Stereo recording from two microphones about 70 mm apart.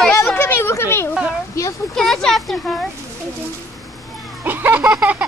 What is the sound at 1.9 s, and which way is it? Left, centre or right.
Speech, centre.